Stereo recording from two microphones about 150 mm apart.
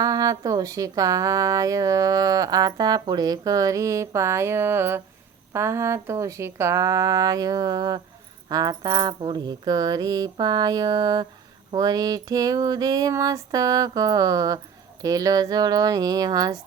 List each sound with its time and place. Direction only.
0.0 s speech: 25° right (ahead or behind)